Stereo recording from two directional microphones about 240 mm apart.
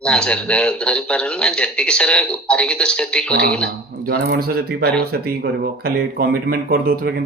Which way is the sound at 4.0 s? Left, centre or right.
Right.